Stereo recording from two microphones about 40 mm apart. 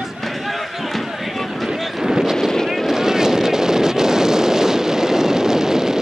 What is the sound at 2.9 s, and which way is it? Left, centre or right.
Vehicle, centre.